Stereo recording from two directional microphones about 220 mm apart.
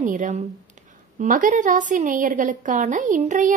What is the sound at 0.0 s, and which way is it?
A woman's voice, 35° right (ahead or behind).